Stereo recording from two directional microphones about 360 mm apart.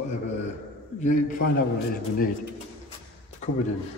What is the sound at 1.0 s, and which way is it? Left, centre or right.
Speech, left.